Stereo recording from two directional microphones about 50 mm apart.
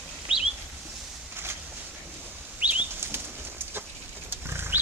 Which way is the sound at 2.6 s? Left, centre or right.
Right.